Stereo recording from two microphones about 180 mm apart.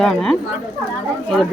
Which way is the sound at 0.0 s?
Centre (ahead or behind).